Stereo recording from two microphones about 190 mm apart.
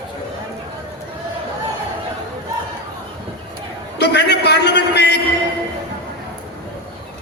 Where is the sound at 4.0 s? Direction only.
60° left (ahead or behind).